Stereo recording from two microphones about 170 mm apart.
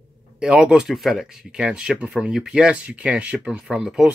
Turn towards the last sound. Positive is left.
turn(degrees=-5)  # may be behind; listen again after turning